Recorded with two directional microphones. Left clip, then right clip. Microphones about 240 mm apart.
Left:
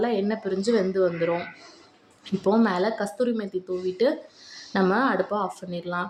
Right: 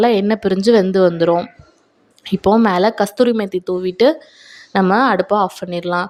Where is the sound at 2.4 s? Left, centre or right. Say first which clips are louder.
Right 9 dB; right.